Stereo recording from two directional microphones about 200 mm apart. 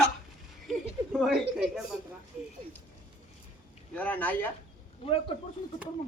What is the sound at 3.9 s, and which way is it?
Speech, 5° left (ahead or behind).